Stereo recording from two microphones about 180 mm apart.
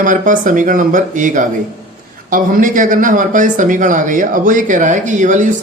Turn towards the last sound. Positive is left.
turn(degrees=-45)  # may be behind; listen again after turning